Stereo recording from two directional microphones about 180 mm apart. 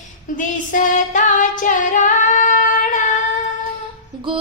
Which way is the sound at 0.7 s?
45° left (ahead or behind).